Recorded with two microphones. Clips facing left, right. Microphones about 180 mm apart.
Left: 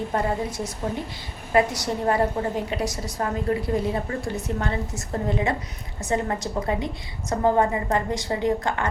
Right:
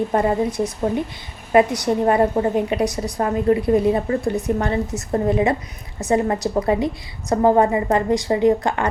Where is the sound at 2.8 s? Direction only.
60° right (ahead or behind).